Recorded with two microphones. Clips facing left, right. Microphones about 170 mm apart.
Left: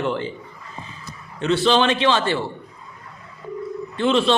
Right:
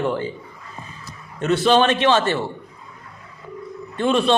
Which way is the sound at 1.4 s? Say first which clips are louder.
Right 2 dB; 45° right (ahead or behind).